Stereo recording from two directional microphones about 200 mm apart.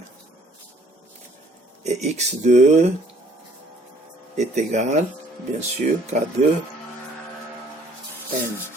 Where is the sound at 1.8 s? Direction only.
35° right (ahead or behind).